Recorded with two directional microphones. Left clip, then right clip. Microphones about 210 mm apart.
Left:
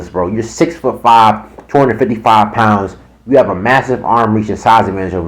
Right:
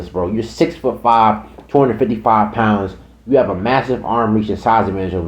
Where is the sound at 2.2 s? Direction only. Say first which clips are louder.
Left 6 dB; 20° left (ahead or behind).